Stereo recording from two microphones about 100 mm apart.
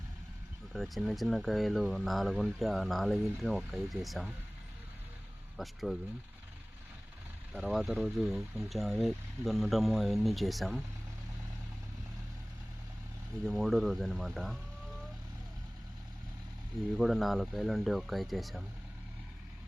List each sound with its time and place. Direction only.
0.7 s speech: centre (ahead or behind)
5.5 s speech: centre (ahead or behind)
7.5 s speech: 5° right (ahead or behind)
13.4 s speech: centre (ahead or behind)
17.0 s speech: centre (ahead or behind)